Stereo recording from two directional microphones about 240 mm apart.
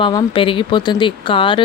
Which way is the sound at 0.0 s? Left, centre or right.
Centre.